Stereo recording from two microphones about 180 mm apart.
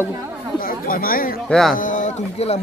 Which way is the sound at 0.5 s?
50° left (ahead or behind).